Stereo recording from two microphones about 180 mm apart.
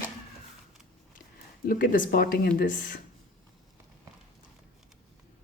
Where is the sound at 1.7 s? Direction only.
50° left (ahead or behind).